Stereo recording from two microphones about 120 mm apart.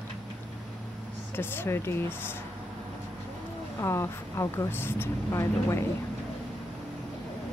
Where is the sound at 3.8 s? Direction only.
20° left (ahead or behind).